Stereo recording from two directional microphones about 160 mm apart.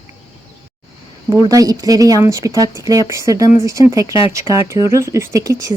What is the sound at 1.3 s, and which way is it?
Speech, 20° right (ahead or behind).